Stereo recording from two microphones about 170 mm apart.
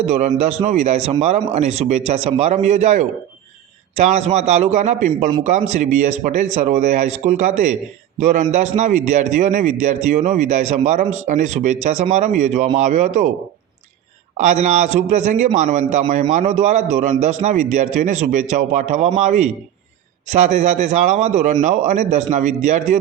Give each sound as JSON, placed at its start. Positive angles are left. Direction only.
{"t": 0.1, "sound": "a man's voice", "side_deg": -40}
{"t": 14.3, "sound": "a man's voice", "side_deg": -45}